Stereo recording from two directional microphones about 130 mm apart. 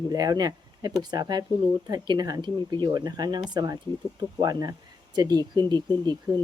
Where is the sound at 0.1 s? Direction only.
30° right (ahead or behind).